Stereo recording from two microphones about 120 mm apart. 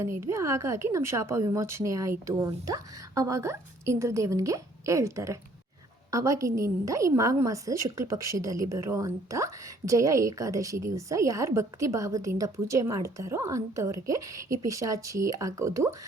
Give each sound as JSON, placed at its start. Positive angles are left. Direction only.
{"t": 0.0, "sound": "a woman's voice", "side_deg": -25}